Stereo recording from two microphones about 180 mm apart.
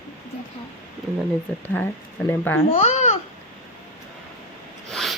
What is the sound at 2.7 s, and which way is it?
Babbling, 35° left (ahead or behind).